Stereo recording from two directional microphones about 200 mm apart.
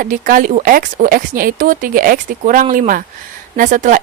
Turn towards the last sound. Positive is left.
turn(degrees=-40)  # may be behind; listen again after turning